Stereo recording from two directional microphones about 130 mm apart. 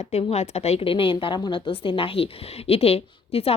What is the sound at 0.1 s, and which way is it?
Speech, 55° left (ahead or behind).